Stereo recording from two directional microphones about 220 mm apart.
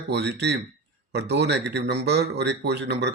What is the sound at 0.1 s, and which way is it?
Speech, 50° right (ahead or behind).